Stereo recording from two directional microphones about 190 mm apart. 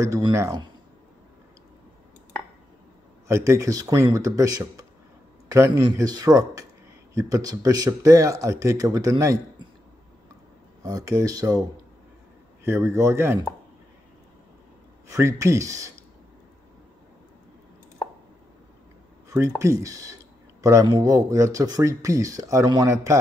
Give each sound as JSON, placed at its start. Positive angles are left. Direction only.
{"t": 0.0, "sound": "speech", "side_deg": -15}
{"t": 3.3, "sound": "a man's voice", "side_deg": -15}
{"t": 10.8, "sound": "speech", "side_deg": -20}
{"t": 12.6, "sound": "speech", "side_deg": -15}
{"t": 15.0, "sound": "speech", "side_deg": -15}
{"t": 19.2, "sound": "speech", "side_deg": -15}